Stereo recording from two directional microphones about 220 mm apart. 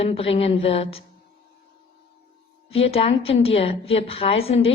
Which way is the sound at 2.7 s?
25° left (ahead or behind).